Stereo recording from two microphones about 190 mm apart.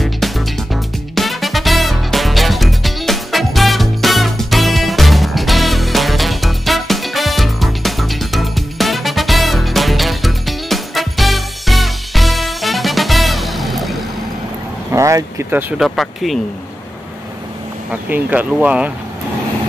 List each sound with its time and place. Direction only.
1.1 s music: centre (ahead or behind)
14.9 s vehicle: 15° right (ahead or behind)
15.8 s speech: centre (ahead or behind)
18.0 s speech: 10° right (ahead or behind)